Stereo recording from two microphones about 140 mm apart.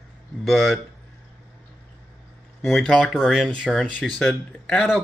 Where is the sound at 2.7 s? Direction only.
Centre (ahead or behind).